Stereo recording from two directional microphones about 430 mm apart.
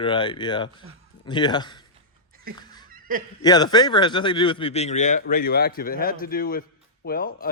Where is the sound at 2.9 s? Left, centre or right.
Centre.